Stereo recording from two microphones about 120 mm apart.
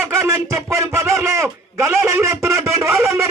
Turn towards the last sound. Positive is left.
turn(degrees=-20)  # may be behind; listen again after turning